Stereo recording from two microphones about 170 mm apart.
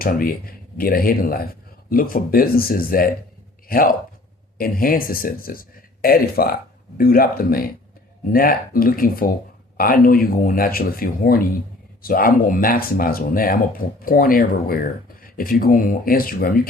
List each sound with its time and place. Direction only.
0.0 s speech: 60° left (ahead or behind)